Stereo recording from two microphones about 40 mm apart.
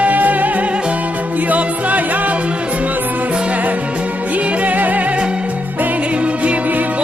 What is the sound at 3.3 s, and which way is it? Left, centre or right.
Music, right.